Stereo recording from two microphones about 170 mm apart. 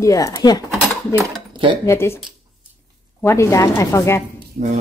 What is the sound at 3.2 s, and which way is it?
Speech, 15° left (ahead or behind).